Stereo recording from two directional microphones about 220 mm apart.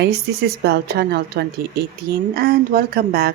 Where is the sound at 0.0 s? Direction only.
45° right (ahead or behind).